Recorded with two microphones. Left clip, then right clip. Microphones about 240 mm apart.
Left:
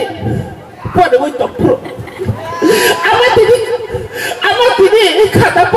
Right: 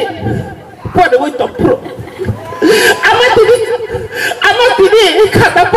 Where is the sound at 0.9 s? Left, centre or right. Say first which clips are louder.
Right 1 dB; left.